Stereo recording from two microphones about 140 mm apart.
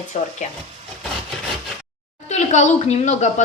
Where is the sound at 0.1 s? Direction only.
65° left (ahead or behind).